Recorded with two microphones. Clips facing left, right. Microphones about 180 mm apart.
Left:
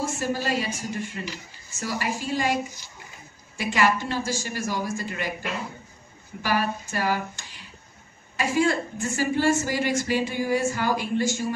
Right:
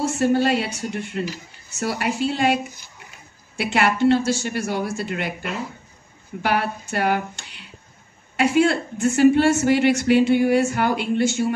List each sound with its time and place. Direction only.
0.0 s a woman's voice: 65° right (ahead or behind)
6.4 s a woman's voice: 70° right (ahead or behind)